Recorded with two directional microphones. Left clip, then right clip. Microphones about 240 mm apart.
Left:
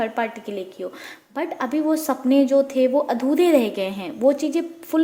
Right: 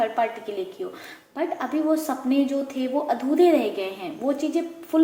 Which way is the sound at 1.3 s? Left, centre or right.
Left.